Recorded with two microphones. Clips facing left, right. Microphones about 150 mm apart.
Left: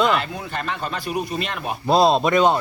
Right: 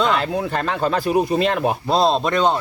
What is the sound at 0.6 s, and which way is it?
Speech, 90° right.